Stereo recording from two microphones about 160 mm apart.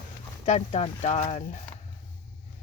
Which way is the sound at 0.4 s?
45° left (ahead or behind).